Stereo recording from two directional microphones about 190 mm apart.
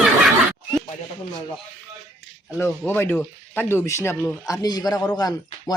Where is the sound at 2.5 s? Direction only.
10° left (ahead or behind).